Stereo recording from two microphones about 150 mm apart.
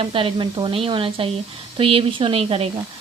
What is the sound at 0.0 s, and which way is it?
A woman's voice, 35° right (ahead or behind).